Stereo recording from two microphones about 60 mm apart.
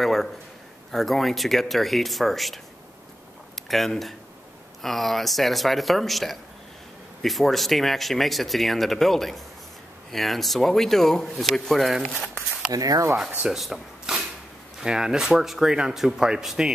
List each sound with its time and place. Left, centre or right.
0.0 s a sound: centre
0.9 s speech: centre
3.6 s speech: centre
12.7 s speech: right
13.5 s a sound: centre
14.8 s speech: centre